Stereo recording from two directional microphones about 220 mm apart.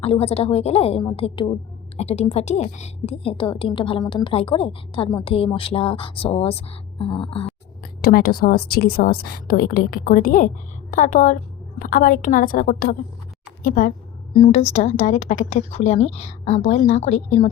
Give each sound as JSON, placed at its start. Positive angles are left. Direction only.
{"t": 0.0, "sound": "a woman's voice", "side_deg": 25}
{"t": 7.8, "sound": "a woman's voice", "side_deg": 40}
{"t": 14.3, "sound": "a woman's voice", "side_deg": 30}